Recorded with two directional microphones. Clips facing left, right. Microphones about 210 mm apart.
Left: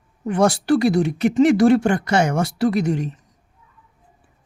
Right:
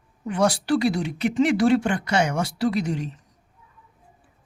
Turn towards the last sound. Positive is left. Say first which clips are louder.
# left 4 dB
turn(degrees=50)  # may be behind; listen again after turning